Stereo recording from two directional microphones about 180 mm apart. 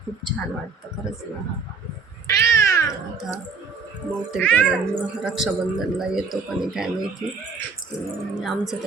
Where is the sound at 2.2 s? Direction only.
15° left (ahead or behind).